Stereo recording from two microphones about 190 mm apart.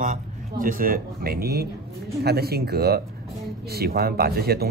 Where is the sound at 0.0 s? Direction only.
45° right (ahead or behind).